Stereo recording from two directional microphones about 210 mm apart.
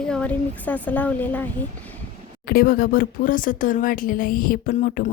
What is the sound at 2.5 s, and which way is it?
Speech, 45° left (ahead or behind).